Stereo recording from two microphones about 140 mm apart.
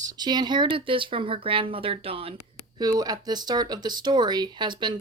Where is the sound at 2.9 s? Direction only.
25° right (ahead or behind).